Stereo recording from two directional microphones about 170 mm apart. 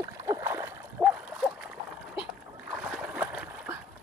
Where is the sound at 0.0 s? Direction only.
20° right (ahead or behind).